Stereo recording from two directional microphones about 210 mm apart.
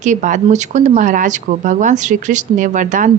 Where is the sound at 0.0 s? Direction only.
35° right (ahead or behind).